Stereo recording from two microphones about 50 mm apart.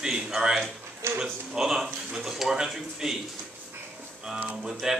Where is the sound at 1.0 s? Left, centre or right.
Right.